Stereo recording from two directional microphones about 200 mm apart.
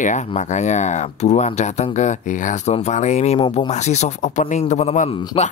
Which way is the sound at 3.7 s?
35° left (ahead or behind).